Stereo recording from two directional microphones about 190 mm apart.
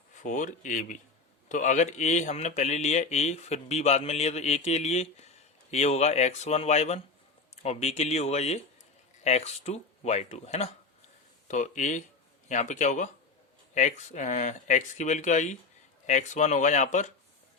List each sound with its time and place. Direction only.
0.2 s a man's voice: 40° left (ahead or behind)